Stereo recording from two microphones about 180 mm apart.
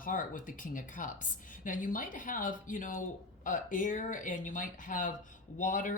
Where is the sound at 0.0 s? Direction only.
45° left (ahead or behind).